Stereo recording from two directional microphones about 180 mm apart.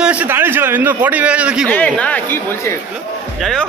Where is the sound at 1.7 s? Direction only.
10° left (ahead or behind).